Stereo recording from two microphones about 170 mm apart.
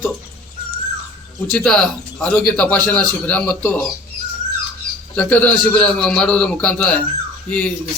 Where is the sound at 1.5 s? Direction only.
5° left (ahead or behind).